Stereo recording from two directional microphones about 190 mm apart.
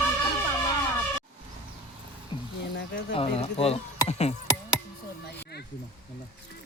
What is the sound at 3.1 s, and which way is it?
Speech, 30° left (ahead or behind).